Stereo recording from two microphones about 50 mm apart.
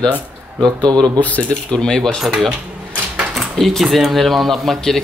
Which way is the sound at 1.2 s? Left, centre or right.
Left.